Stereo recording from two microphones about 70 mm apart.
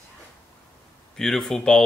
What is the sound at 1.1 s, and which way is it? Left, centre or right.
Speech, centre.